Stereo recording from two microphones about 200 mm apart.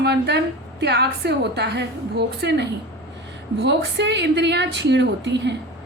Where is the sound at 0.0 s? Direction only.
55° right (ahead or behind).